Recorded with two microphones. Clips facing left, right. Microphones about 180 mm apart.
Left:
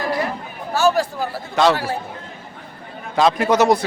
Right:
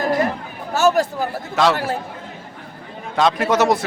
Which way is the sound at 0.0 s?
45° right (ahead or behind).